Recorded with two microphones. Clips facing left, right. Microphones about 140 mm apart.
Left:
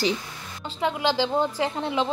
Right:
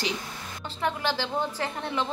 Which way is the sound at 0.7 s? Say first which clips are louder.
Left 5 dB; 15° left (ahead or behind).